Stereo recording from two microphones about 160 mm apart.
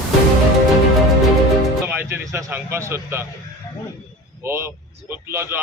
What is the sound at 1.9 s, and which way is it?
Speech, 10° right (ahead or behind).